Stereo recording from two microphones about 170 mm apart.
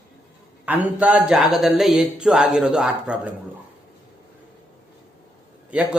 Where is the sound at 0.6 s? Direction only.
10° right (ahead or behind).